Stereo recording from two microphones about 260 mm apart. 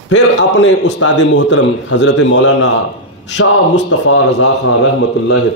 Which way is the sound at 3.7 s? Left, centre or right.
Left.